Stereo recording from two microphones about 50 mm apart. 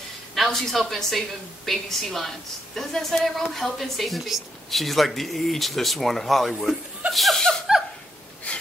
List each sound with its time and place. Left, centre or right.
0.5 s a woman's voice: centre
7.7 s a sound: centre
8.5 s breathing: left